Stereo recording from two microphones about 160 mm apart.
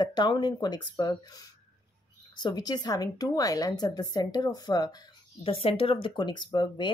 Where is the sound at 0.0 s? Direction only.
25° left (ahead or behind).